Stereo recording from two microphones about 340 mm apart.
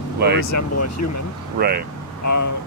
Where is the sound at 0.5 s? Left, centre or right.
Left.